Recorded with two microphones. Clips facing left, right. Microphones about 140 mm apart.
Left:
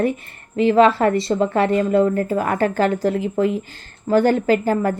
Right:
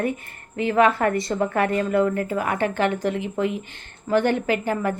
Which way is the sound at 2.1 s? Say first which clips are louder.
Left 4 dB; 35° left (ahead or behind).